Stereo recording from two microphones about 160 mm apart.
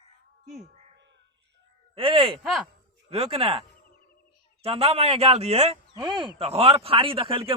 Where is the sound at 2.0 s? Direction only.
30° right (ahead or behind).